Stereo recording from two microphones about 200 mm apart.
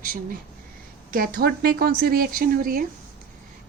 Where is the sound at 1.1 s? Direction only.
50° right (ahead or behind).